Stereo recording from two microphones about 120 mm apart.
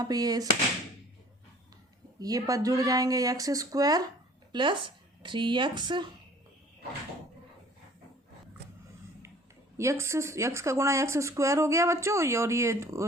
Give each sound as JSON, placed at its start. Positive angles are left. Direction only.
{"t": 0.0, "sound": "speech", "side_deg": -35}
{"t": 2.1, "sound": "speech", "side_deg": -30}
{"t": 4.5, "sound": "speech", "side_deg": -45}
{"t": 9.7, "sound": "speech", "side_deg": -25}